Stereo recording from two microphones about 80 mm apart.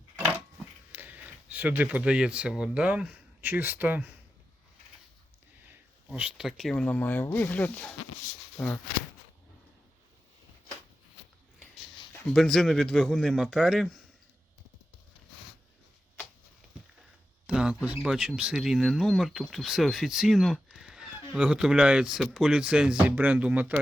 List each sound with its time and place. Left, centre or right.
0.9 s speech: right
6.1 s speech: centre
6.8 s speech: centre
12.3 s speech: centre
17.4 s mouse: centre
17.8 s speech: centre
21.3 s speech: centre
23.0 s speech: right